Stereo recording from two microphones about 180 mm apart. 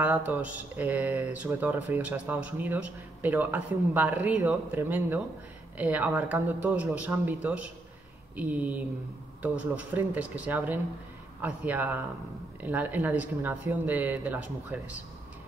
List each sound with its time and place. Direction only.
0.0 s speech: 10° right (ahead or behind)